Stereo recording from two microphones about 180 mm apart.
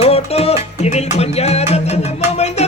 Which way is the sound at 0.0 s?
35° left (ahead or behind).